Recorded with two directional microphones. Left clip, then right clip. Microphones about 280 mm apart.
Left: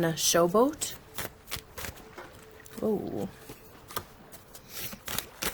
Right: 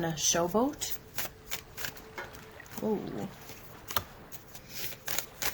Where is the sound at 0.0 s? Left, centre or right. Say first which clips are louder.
Left 5 dB; left.